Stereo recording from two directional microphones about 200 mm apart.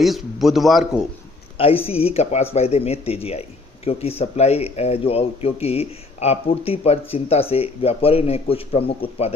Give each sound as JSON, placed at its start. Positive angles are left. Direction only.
{"t": 0.0, "sound": "a man's voice", "side_deg": 0}
{"t": 1.5, "sound": "a man's voice", "side_deg": 30}